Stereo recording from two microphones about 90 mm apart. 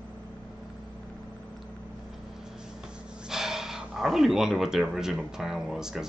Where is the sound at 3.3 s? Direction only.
5° right (ahead or behind).